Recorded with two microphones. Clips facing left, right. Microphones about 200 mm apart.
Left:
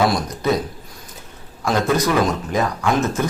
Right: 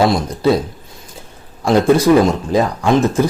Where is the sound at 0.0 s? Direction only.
25° right (ahead or behind).